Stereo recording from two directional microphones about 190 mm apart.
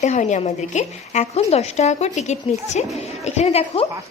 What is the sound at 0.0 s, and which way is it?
A woman's voice, 40° left (ahead or behind).